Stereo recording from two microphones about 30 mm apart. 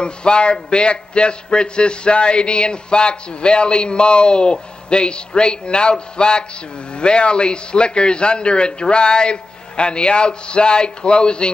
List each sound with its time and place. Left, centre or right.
0.0 s a man's voice: left